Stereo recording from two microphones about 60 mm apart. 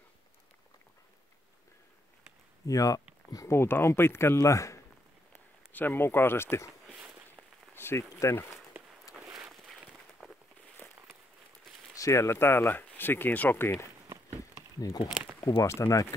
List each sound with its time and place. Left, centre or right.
2.6 s speech: left
3.4 s speech: left
4.4 s speech: left
5.7 s speech: left
7.7 s a sound: left
8.2 s speech: left
10.2 s a sound: centre
12.0 s speech: left
15.4 s speech: left